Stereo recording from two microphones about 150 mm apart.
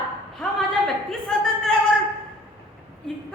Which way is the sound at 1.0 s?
5° left (ahead or behind).